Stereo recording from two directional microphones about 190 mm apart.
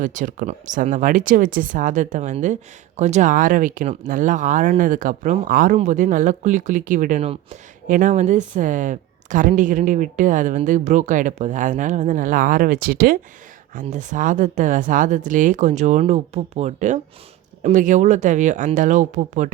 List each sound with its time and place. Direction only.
0.0 s speech: 40° right (ahead or behind)
13.7 s speech: 40° right (ahead or behind)